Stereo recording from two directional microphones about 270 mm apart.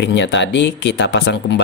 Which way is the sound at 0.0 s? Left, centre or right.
Left.